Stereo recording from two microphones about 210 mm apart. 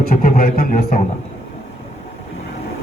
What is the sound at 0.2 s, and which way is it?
Speech, 40° left (ahead or behind).